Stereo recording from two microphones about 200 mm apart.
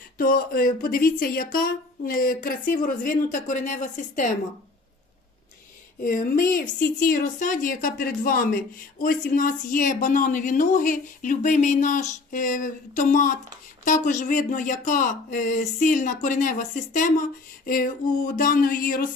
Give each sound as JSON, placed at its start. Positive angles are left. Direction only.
{"t": 0.2, "sound": "speech", "side_deg": 50}
{"t": 6.0, "sound": "speech", "side_deg": 40}